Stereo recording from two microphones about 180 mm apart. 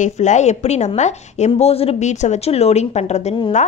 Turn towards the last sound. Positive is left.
turn(degrees=40)  # may be behind; listen again after turning